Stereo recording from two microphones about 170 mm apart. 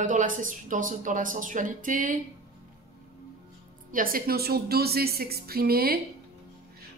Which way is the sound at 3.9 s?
55° right (ahead or behind).